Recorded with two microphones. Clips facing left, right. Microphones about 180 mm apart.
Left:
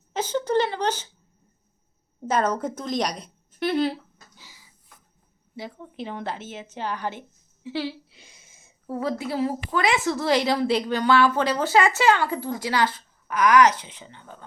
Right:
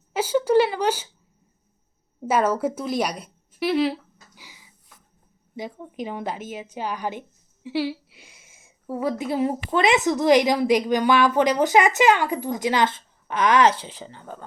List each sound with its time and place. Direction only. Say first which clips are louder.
0.1 s a woman's voice: right 4 dB; 10° right (ahead or behind)
2.2 s a woman's voice: right 3 dB; 10° right (ahead or behind)
4.4 s a sound: right 5 dB; 15° right (ahead or behind)
5.5 s a woman's voice: right 3 dB; 15° right (ahead or behind); by 14.4 s 40° right (ahead or behind)